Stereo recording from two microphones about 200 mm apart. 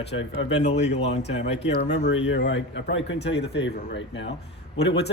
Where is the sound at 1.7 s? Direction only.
60° left (ahead or behind).